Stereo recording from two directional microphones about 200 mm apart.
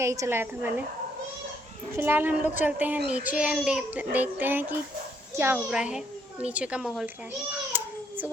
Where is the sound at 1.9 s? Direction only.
10° right (ahead or behind).